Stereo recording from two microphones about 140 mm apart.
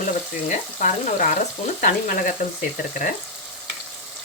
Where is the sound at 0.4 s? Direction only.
60° left (ahead or behind).